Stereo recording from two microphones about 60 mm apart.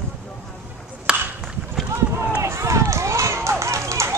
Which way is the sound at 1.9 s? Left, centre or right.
Right.